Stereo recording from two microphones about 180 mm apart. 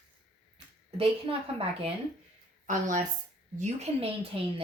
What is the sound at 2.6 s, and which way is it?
Speech, 45° right (ahead or behind).